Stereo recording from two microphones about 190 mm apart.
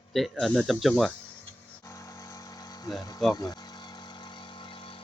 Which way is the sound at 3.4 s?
20° left (ahead or behind).